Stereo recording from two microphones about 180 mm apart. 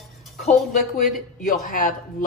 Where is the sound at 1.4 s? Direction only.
45° left (ahead or behind).